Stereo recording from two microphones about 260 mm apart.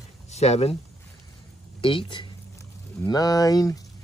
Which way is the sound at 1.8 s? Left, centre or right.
Centre.